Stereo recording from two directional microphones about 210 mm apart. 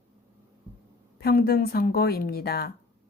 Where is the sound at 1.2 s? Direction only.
45° left (ahead or behind).